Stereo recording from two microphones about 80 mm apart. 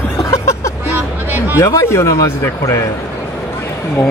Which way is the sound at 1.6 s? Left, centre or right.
Left.